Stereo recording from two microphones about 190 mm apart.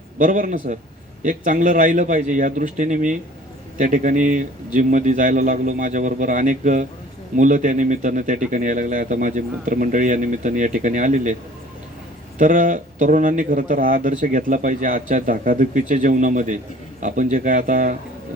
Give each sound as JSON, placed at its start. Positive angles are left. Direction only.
{"t": 0.2, "sound": "speech", "side_deg": -45}
{"t": 12.4, "sound": "speech", "side_deg": -45}